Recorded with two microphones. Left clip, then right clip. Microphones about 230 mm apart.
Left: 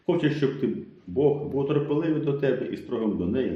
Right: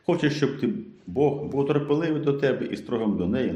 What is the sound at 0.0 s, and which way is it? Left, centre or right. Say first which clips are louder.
A man's voice: right 1 dB; right.